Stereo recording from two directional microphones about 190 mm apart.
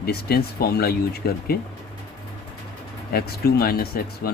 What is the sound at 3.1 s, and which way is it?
Speech, 55° left (ahead or behind).